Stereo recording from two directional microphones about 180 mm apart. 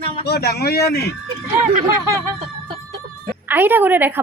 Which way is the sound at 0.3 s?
65° left (ahead or behind).